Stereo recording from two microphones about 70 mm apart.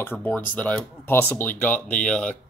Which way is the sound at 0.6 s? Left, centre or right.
Left.